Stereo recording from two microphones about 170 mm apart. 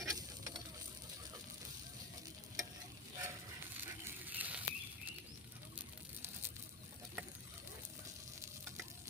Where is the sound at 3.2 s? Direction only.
10° right (ahead or behind).